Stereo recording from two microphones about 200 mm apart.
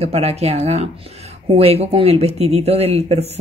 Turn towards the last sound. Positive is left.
turn(degrees=-30)  # may be behind; listen again after turning